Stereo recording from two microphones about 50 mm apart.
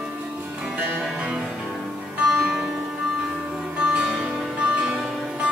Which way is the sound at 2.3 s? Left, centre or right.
Centre.